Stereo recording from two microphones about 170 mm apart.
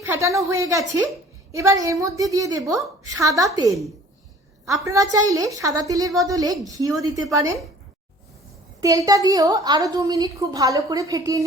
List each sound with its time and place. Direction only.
0.0 s a woman's voice: 15° right (ahead or behind)
8.8 s a woman's voice: 20° right (ahead or behind)